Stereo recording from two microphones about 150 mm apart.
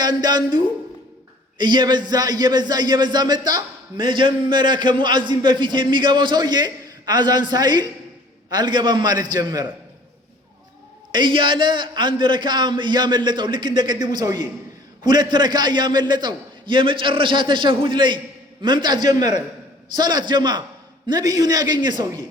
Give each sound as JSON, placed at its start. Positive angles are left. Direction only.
{"t": 0.0, "sound": "a man's voice", "side_deg": -30}
{"t": 11.1, "sound": "a man's voice", "side_deg": -30}